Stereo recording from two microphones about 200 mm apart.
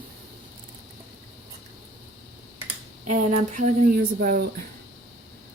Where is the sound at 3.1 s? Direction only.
40° right (ahead or behind).